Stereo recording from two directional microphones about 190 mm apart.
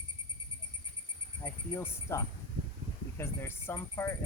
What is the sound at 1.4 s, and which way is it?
Speech, 15° left (ahead or behind).